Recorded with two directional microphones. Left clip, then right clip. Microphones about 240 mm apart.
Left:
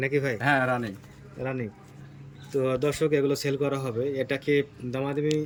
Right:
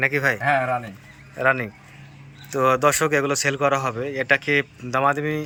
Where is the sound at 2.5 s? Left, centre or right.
Right.